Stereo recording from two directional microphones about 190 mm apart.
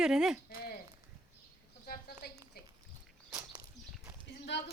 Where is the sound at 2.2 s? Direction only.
55° left (ahead or behind).